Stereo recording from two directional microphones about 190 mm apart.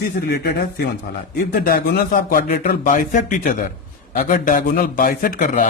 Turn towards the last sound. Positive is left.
turn(degrees=40)  # may be behind; listen again after turning